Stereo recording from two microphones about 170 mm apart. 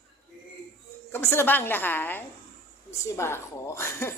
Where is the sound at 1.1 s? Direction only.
15° left (ahead or behind).